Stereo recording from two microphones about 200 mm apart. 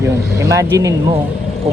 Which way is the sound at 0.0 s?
15° right (ahead or behind).